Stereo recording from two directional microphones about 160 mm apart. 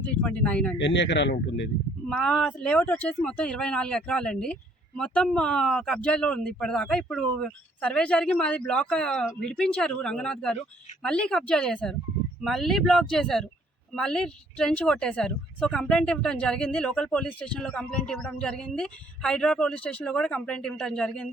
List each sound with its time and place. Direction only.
0.0 s speech: 10° left (ahead or behind)
0.8 s speech: 90° left
2.0 s speech: 5° left (ahead or behind)